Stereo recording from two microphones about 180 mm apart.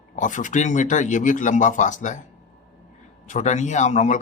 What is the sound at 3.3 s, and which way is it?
Speech, 40° left (ahead or behind).